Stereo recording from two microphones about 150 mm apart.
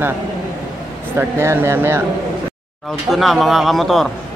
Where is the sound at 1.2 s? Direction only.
15° right (ahead or behind).